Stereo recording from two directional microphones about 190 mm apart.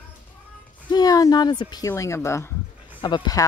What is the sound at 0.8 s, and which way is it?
Speech, 20° left (ahead or behind).